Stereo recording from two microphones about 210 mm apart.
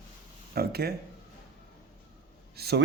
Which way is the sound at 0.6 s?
50° right (ahead or behind).